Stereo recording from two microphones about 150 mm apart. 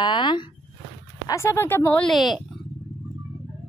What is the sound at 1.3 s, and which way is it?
Speech, 15° left (ahead or behind).